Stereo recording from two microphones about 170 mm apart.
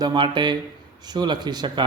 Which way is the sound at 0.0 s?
25° right (ahead or behind).